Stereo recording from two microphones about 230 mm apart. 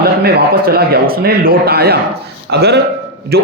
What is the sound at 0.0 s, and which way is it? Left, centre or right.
A man's voice, right.